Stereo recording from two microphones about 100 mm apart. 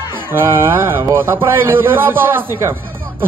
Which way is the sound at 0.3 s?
25° right (ahead or behind).